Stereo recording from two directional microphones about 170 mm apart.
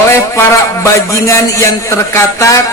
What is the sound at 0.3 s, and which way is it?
A man's voice, 15° left (ahead or behind).